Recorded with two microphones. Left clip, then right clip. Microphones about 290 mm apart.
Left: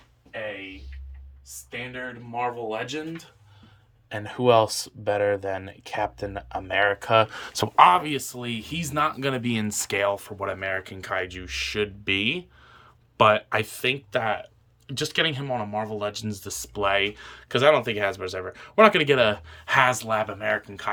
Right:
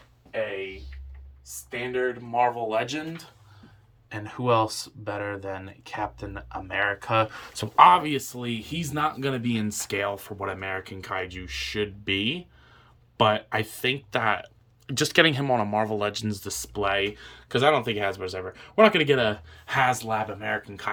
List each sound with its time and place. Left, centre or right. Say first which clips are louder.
1.9 s speech: right 7 dB; centre
4.1 s speech: left 4 dB; left
7.8 s speech: right 1 dB; centre